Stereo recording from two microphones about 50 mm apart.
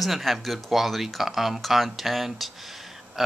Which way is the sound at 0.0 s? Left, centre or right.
Centre.